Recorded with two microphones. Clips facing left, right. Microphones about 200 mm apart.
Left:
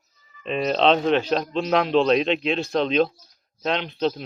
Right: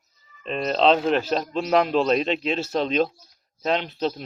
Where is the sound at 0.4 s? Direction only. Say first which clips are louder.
Even; centre (ahead or behind).